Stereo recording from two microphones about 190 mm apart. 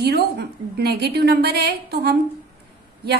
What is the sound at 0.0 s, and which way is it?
A woman's voice, 60° right (ahead or behind).